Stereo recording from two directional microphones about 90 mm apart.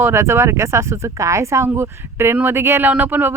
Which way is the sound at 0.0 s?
30° right (ahead or behind).